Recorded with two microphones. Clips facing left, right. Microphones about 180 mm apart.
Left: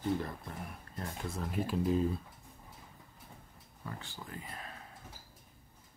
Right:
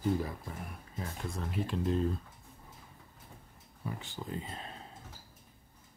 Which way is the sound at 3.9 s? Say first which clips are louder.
Right 5 dB; 20° right (ahead or behind).